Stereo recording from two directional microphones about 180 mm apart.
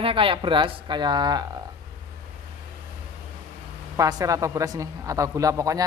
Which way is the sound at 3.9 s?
20° right (ahead or behind).